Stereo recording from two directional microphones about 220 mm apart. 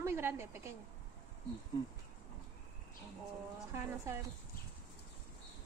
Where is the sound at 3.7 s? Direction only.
10° right (ahead or behind).